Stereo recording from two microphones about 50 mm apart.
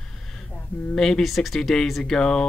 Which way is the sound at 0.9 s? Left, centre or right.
Centre.